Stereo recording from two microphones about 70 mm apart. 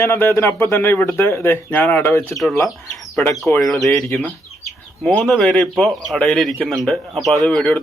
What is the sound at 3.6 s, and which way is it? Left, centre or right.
Speech, centre.